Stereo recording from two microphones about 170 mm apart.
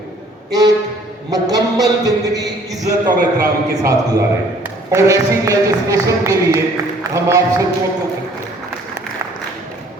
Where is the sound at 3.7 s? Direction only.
20° right (ahead or behind).